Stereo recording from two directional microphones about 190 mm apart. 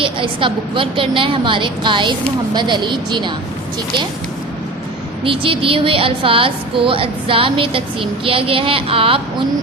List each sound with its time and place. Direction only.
0.0 s speech: 25° right (ahead or behind)
5.2 s speech: 30° right (ahead or behind)